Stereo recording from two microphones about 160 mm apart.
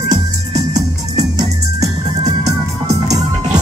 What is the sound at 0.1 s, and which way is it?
Music, 20° right (ahead or behind).